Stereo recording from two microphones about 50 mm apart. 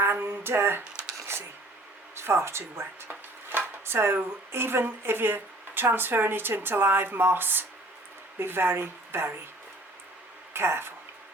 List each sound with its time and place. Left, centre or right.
0.1 s speech: right
2.1 s speech: right
3.1 s speech: right
10.5 s speech: right